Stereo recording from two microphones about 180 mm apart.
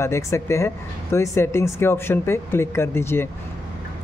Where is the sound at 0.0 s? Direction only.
15° left (ahead or behind).